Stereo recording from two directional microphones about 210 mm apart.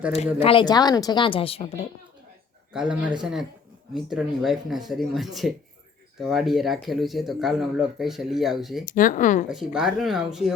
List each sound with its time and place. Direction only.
0.3 s a woman's voice: 25° left (ahead or behind)
2.7 s speech: 5° right (ahead or behind)
8.9 s speech: 40° left (ahead or behind)
9.5 s speech: 5° right (ahead or behind)